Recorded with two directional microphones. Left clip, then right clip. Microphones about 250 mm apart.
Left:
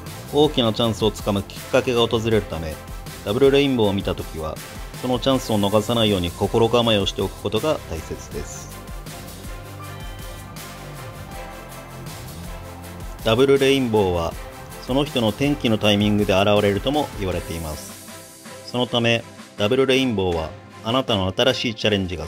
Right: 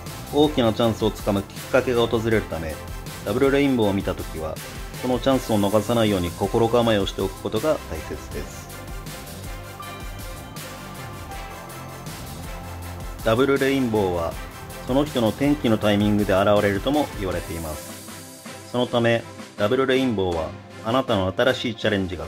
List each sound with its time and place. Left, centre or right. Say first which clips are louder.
0.4 s speech: left 1 dB; centre
13.2 s speech: left 3 dB; left
18.7 s speech: even; left